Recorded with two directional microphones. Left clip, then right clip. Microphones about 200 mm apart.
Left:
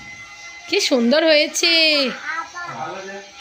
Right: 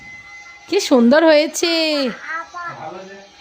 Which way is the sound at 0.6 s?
35° right (ahead or behind).